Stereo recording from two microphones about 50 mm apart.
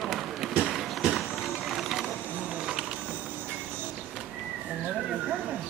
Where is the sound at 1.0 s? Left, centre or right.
Centre.